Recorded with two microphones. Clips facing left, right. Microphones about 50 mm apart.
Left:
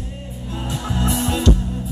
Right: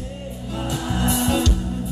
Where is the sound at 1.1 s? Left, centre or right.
Centre.